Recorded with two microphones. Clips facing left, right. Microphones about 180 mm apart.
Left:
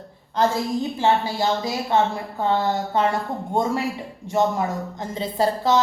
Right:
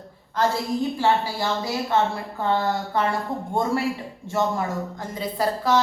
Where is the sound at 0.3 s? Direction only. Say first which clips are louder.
Left 2 dB; 20° left (ahead or behind).